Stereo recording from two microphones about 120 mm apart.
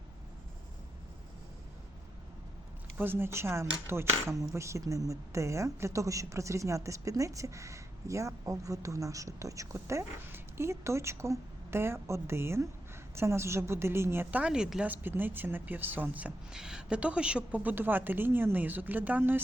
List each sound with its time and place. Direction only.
3.0 s a woman's voice: 20° right (ahead or behind)